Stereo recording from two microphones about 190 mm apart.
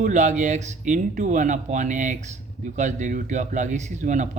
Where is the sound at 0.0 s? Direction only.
40° right (ahead or behind).